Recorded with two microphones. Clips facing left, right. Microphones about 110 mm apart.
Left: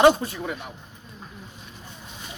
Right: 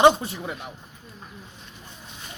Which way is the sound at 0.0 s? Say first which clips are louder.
Even; 20° right (ahead or behind).